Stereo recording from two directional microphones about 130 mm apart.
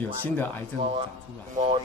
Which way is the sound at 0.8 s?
50° right (ahead or behind).